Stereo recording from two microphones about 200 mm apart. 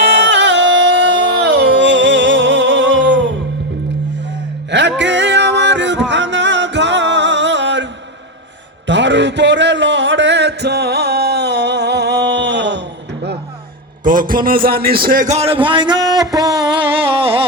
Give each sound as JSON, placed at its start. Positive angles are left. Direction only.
{"t": 0.0, "sound": "music", "side_deg": -60}
{"t": 4.7, "sound": "music", "side_deg": -60}
{"t": 8.9, "sound": "music", "side_deg": -65}
{"t": 14.0, "sound": "a man's voice", "side_deg": -40}